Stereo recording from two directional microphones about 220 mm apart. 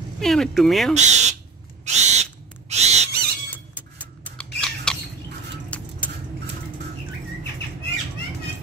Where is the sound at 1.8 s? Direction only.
30° right (ahead or behind).